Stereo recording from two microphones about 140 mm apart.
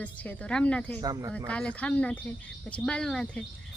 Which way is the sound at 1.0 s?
25° right (ahead or behind).